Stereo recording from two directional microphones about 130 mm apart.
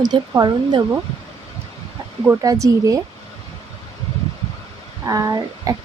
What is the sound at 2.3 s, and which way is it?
Speech, 25° right (ahead or behind).